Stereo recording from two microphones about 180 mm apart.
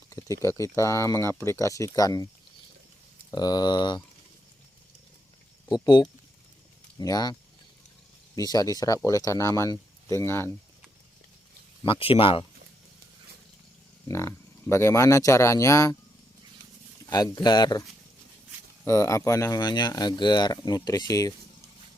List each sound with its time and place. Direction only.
0.1 s speech: 15° left (ahead or behind)
3.3 s speech: 25° left (ahead or behind)
5.7 s speech: 25° left (ahead or behind)
8.4 s speech: 20° left (ahead or behind)
11.8 s speech: 30° left (ahead or behind)
14.1 s speech: 15° left (ahead or behind)
17.1 s speech: 20° left (ahead or behind)
18.9 s speech: 15° left (ahead or behind)